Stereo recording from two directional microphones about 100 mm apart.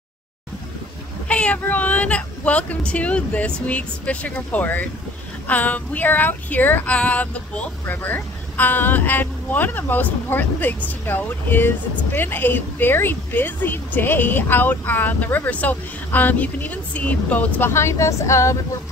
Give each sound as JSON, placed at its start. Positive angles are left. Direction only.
{"t": 1.3, "sound": "a woman's voice", "side_deg": 10}
{"t": 17.6, "sound": "a woman's voice", "side_deg": 25}